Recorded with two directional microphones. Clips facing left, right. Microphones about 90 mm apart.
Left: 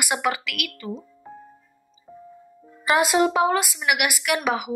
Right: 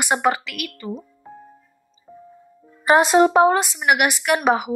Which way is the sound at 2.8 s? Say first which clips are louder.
Right 5 dB; 35° right (ahead or behind).